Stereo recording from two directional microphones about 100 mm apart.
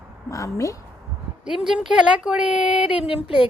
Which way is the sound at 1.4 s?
5° right (ahead or behind).